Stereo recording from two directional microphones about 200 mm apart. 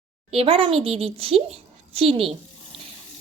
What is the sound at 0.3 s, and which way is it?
A woman's voice, 30° right (ahead or behind).